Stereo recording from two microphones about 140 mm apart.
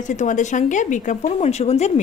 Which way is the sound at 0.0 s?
60° left (ahead or behind).